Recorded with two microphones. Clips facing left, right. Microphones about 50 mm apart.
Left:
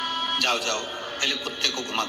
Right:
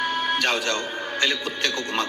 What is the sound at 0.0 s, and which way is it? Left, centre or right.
Music, right.